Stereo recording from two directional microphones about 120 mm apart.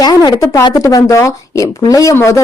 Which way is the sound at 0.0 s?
35° left (ahead or behind).